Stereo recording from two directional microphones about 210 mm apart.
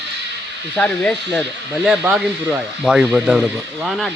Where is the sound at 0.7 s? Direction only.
5° left (ahead or behind).